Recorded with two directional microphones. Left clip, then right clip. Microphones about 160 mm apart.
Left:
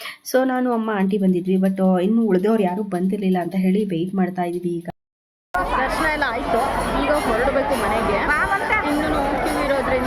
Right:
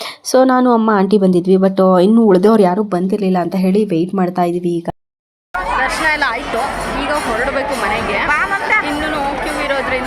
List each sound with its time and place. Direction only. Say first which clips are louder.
0.3 s speech: right 9 dB; 25° right (ahead or behind)
2.7 s a woman's voice: right 8 dB; 25° right (ahead or behind)
5.8 s chatter: right 5 dB; 10° left (ahead or behind)
8.3 s chatter: right 7 dB; 25° right (ahead or behind)
9.6 s a sound: right 4 dB; 15° left (ahead or behind)